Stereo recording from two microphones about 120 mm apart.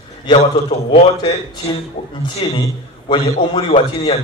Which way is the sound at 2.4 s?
45° left (ahead or behind).